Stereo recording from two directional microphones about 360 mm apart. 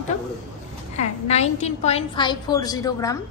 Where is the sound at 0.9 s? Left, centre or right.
Centre.